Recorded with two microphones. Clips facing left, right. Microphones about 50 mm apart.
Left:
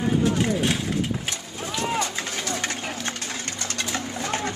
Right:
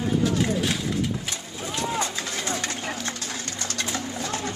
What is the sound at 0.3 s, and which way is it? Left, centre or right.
Speech, left.